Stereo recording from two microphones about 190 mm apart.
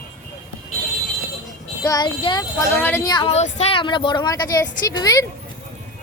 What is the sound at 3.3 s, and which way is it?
Speech, 35° left (ahead or behind).